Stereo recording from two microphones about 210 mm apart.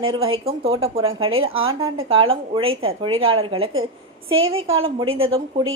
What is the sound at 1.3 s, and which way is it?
Speech, 75° right (ahead or behind).